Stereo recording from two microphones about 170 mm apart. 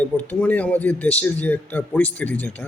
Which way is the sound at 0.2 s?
10° left (ahead or behind).